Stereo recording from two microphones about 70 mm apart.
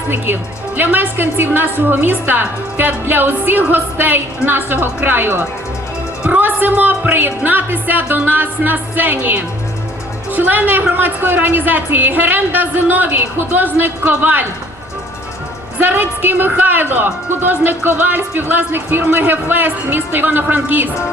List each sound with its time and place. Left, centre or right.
0.8 s a woman's voice: right
15.8 s a woman's voice: right